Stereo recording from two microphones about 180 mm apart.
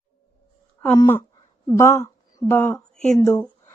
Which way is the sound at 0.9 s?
15° left (ahead or behind).